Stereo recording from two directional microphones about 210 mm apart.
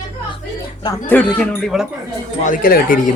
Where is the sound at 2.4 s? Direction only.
40° left (ahead or behind).